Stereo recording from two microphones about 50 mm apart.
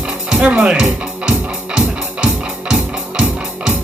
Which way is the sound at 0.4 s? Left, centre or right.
Centre.